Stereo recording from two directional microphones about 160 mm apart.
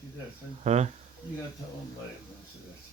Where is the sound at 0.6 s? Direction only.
45° right (ahead or behind).